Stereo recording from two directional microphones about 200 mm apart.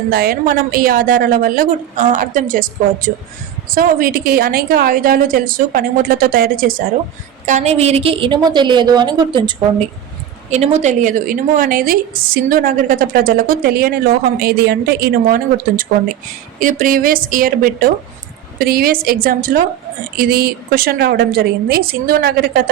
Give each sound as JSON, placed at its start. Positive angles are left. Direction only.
{"t": 0.1, "sound": "a woman's voice", "side_deg": -50}
{"t": 10.5, "sound": "a woman's voice", "side_deg": -35}